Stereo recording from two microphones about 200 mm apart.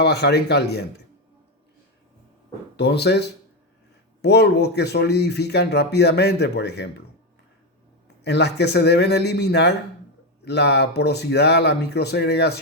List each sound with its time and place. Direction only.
0.0 s speech: 55° left (ahead or behind)
2.7 s speech: 55° left (ahead or behind)
8.2 s speech: 55° left (ahead or behind)